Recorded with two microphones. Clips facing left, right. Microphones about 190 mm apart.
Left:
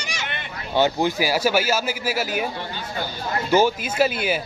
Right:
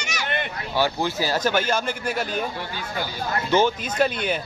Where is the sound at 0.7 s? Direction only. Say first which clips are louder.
Left 4 dB; 20° left (ahead or behind).